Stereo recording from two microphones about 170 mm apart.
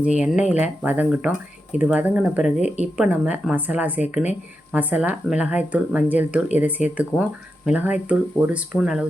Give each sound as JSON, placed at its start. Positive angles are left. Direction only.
{"t": 0.2, "sound": "speech", "side_deg": -5}
{"t": 2.6, "sound": "speech", "side_deg": 40}
{"t": 3.0, "sound": "speech", "side_deg": -5}